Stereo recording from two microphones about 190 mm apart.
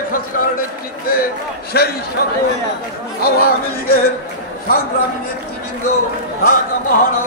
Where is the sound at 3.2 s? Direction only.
55° left (ahead or behind).